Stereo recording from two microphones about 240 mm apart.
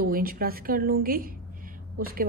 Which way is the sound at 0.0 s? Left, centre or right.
Right.